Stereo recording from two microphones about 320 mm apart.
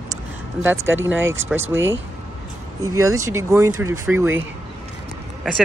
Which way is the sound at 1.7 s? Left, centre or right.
Right.